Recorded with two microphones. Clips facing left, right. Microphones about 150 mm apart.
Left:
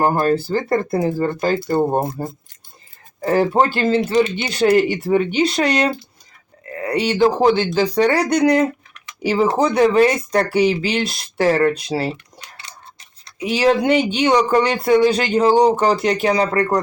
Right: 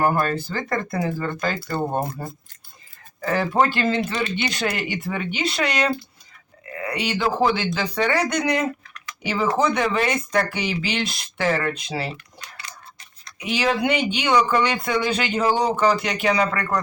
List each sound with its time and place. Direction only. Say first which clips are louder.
0.0 s speech: left 4 dB; 30° left (ahead or behind)
1.5 s speech: left 7 dB; 25° left (ahead or behind)
4.1 s speech: left 8 dB; 20° left (ahead or behind); by 12.1 s 35° left (ahead or behind)
12.1 s typing: even; 25° left (ahead or behind)
13.2 s speech: left 7 dB; 30° left (ahead or behind)